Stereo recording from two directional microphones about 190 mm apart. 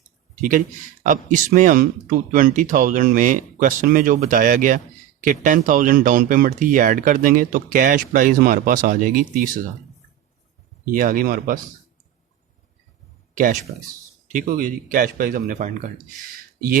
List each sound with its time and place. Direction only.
1.0 s speech: 45° right (ahead or behind)
10.9 s speech: 45° right (ahead or behind)
13.7 s speech: 50° right (ahead or behind)